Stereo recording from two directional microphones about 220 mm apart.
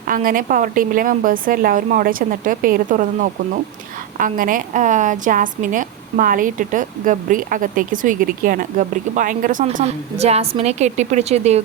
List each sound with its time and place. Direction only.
0.1 s a woman's voice: 40° right (ahead or behind)